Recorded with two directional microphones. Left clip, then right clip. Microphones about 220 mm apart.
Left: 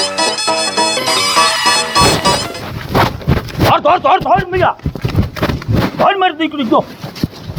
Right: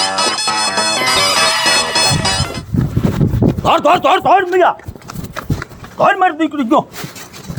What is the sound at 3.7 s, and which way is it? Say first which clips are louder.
Speech: left 1 dB; 55° right (ahead or behind).